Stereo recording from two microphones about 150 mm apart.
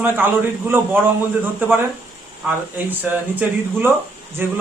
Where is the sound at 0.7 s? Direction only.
10° right (ahead or behind).